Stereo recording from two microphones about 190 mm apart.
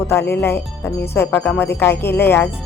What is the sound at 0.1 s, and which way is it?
Speech, 15° left (ahead or behind).